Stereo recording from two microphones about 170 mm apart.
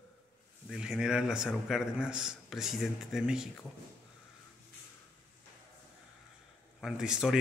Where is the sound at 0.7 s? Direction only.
5° right (ahead or behind).